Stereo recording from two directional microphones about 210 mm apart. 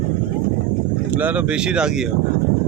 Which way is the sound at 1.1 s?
10° right (ahead or behind).